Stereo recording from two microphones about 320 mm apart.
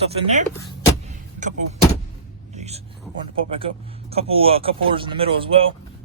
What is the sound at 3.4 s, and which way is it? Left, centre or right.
Speech, centre.